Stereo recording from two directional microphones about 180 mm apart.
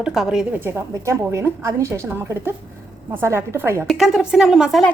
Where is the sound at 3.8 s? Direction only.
Centre (ahead or behind).